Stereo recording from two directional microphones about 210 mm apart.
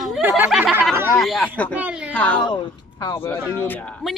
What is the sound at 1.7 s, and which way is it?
Speech, 5° right (ahead or behind).